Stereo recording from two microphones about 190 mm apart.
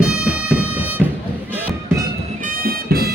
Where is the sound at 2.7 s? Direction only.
55° right (ahead or behind).